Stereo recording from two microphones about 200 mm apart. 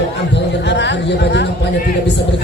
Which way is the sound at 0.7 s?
60° left (ahead or behind).